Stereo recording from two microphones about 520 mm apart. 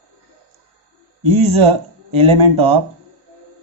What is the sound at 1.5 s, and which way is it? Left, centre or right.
Speech, right.